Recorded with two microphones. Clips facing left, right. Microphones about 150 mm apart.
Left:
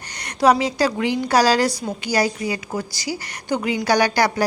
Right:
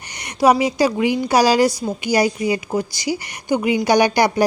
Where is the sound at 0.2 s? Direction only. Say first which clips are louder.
Right 2 dB; 10° right (ahead or behind).